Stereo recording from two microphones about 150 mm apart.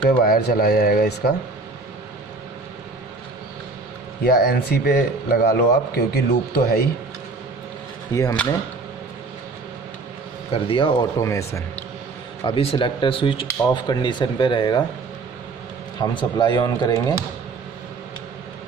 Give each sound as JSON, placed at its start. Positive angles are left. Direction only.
{"t": 0.2, "sound": "speech", "side_deg": 90}
{"t": 4.2, "sound": "speech", "side_deg": 90}
{"t": 8.1, "sound": "speech", "side_deg": 20}
{"t": 10.5, "sound": "speech", "side_deg": 35}
{"t": 11.1, "sound": "speech", "side_deg": 20}
{"t": 12.4, "sound": "speech", "side_deg": 35}
{"t": 16.0, "sound": "speech", "side_deg": 30}